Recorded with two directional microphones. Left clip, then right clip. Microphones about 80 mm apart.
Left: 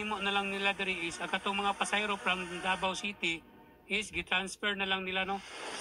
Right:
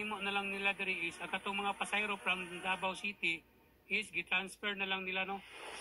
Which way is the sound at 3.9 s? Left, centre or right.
Left.